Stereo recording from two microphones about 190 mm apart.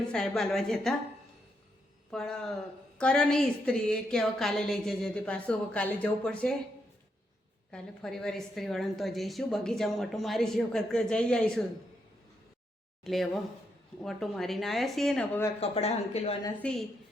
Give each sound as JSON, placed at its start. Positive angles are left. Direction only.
{"t": 0.1, "sound": "a woman's voice", "side_deg": 5}
{"t": 2.0, "sound": "a woman's voice", "side_deg": 5}
{"t": 7.7, "sound": "a woman's voice", "side_deg": 5}
{"t": 13.1, "sound": "a woman's voice", "side_deg": 0}
{"t": 15.6, "sound": "speech", "side_deg": 35}
{"t": 16.6, "sound": "a woman's voice", "side_deg": 5}